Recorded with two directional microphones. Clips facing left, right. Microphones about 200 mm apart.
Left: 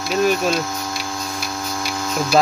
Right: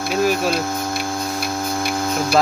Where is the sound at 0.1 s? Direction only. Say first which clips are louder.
Left 1 dB; 5° right (ahead or behind).